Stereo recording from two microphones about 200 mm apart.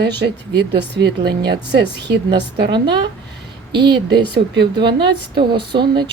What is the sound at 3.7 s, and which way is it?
Speech, 25° right (ahead or behind).